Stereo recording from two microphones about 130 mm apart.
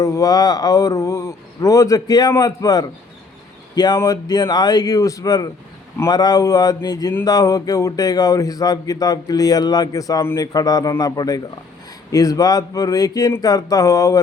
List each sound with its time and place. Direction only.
0.0 s speech: 25° left (ahead or behind)